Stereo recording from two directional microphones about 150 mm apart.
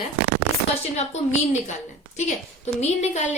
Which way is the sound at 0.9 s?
50° left (ahead or behind).